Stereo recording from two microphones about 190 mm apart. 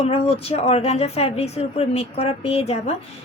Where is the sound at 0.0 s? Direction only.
30° left (ahead or behind).